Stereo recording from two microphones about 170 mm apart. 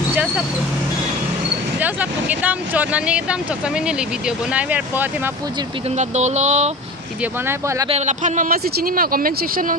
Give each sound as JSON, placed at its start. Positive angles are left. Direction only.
{"t": 1.8, "sound": "speech", "side_deg": -10}
{"t": 5.9, "sound": "speech", "side_deg": -40}
{"t": 7.4, "sound": "speech", "side_deg": -15}
{"t": 7.9, "sound": "speech", "side_deg": -45}